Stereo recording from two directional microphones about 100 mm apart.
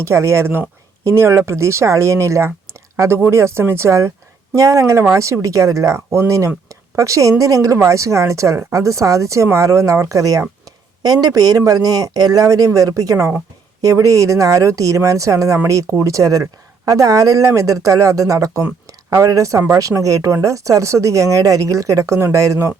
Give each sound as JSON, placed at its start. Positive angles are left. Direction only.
{"t": 0.0, "sound": "speech", "side_deg": -30}